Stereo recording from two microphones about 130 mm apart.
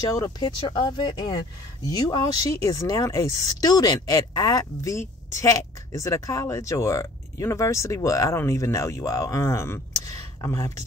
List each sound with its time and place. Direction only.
0.4 s speech: 35° left (ahead or behind)